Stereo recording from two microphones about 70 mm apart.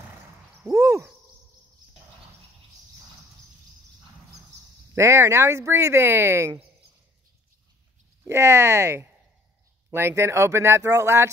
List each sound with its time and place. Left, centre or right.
0.7 s a sound: right
4.9 s speech: right
8.3 s speech: right